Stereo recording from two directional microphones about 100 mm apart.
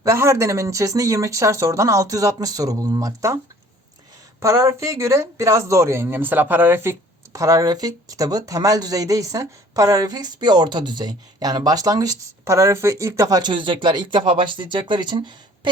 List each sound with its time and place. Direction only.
0.0 s speech: 30° right (ahead or behind)
4.4 s speech: 30° right (ahead or behind)
7.3 s speech: 35° right (ahead or behind); by 15.7 s 50° right (ahead or behind)